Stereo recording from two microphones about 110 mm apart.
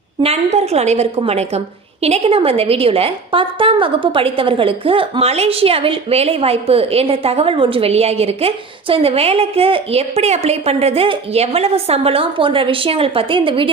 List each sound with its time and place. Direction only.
0.2 s a woman's voice: 70° right (ahead or behind); by 13.7 s 50° right (ahead or behind)